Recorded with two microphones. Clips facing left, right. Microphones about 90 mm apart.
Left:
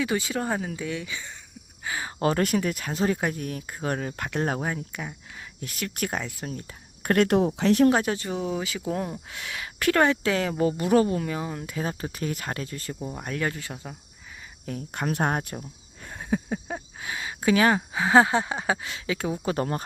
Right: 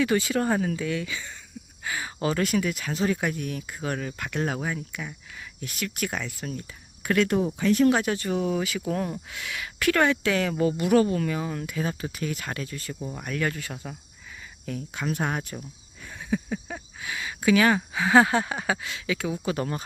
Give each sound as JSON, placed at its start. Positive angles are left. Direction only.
{"t": 0.0, "sound": "speech", "side_deg": 20}
{"t": 2.1, "sound": "speech", "side_deg": 45}
{"t": 6.1, "sound": "speech", "side_deg": 30}
{"t": 7.9, "sound": "speech", "side_deg": 30}
{"t": 11.7, "sound": "speech", "side_deg": 35}
{"t": 13.0, "sound": "speech", "side_deg": 20}
{"t": 14.9, "sound": "speech", "side_deg": 45}